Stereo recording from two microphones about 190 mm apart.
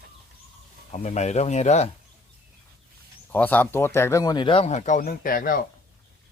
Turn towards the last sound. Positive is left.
turn(degrees=45)  # may be behind; listen again after turning